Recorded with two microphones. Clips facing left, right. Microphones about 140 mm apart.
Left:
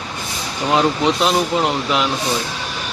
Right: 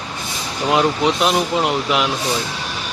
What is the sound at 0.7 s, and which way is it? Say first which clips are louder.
Speech: left 1 dB; centre (ahead or behind).